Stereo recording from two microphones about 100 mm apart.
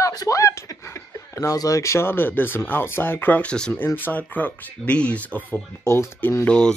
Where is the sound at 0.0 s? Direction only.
35° left (ahead or behind); by 5.9 s 15° left (ahead or behind).